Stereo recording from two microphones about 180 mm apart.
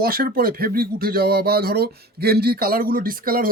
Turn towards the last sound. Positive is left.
turn(degrees=-55)  # may be behind; listen again after turning